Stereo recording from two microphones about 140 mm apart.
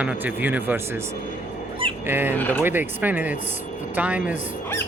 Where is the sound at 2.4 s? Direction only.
10° left (ahead or behind).